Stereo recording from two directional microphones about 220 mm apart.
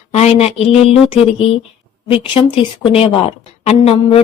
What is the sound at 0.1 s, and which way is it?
A woman's voice, 30° left (ahead or behind).